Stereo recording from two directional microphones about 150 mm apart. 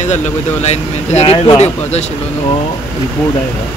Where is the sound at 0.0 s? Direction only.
50° left (ahead or behind).